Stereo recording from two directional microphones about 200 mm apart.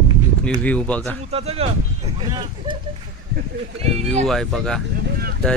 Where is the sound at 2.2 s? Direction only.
20° right (ahead or behind).